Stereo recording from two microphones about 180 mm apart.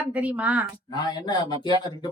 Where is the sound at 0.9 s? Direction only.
25° left (ahead or behind).